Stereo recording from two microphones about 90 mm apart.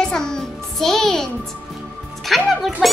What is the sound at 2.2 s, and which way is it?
Speech, centre (ahead or behind).